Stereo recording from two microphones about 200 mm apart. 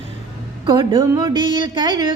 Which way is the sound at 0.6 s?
25° right (ahead or behind).